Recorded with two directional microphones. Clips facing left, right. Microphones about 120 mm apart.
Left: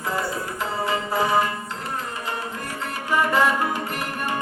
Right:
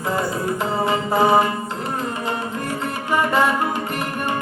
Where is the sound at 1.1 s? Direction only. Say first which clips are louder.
Right 6 dB; 25° right (ahead or behind).